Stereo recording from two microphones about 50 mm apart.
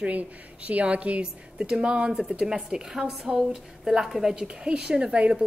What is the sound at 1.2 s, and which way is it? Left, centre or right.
A woman's voice, centre.